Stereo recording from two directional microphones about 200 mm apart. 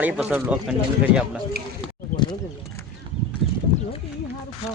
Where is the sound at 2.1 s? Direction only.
20° left (ahead or behind).